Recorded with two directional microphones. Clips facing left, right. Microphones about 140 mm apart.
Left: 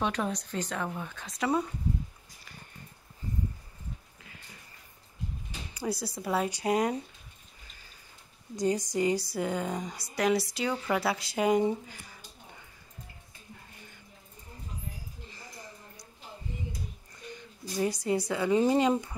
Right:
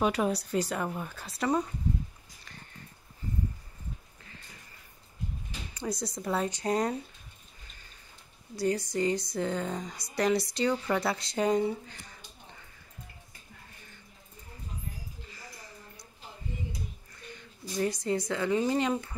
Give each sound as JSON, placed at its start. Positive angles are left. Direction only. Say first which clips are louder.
{"t": 0.0, "sound": "speech", "louder": "right 3 dB", "side_deg": -5}
{"t": 5.8, "sound": "a woman's voice", "louder": "left 1 dB", "side_deg": 5}
{"t": 8.5, "sound": "a woman's voice", "louder": "left 1 dB", "side_deg": 15}
{"t": 17.7, "sound": "a woman's voice", "louder": "left 1 dB", "side_deg": 10}